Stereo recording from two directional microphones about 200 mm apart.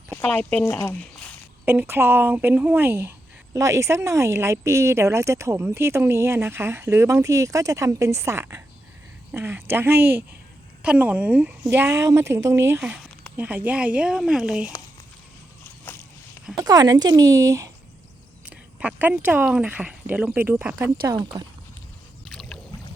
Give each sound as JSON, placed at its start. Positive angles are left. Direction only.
{"t": 0.1, "sound": "speech", "side_deg": 5}
{"t": 1.6, "sound": "speech", "side_deg": -10}
{"t": 16.6, "sound": "speech", "side_deg": -20}
{"t": 22.4, "sound": "boat", "side_deg": 0}